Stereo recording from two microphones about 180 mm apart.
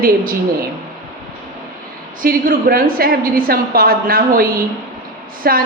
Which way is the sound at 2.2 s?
55° right (ahead or behind).